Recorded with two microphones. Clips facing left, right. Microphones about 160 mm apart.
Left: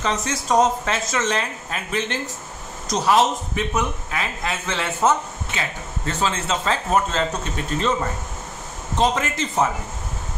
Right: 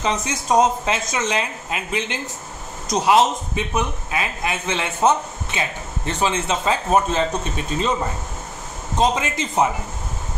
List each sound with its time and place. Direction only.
0.0 s a man's voice: 15° right (ahead or behind)
8.9 s a man's voice: 15° right (ahead or behind)